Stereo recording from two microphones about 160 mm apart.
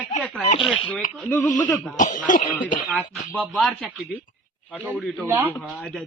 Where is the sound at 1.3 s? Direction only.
15° left (ahead or behind).